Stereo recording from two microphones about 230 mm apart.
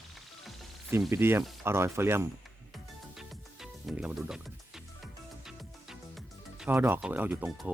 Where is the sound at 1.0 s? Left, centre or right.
Centre.